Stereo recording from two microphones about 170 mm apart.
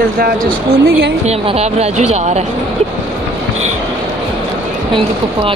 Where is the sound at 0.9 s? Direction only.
70° right (ahead or behind).